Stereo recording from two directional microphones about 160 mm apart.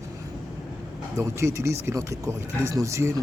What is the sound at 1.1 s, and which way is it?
Speech, 20° right (ahead or behind).